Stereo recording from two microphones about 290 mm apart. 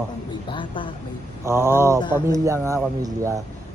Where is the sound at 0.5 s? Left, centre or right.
Centre.